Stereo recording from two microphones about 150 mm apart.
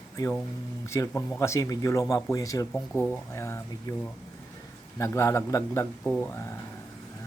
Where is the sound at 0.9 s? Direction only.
15° left (ahead or behind).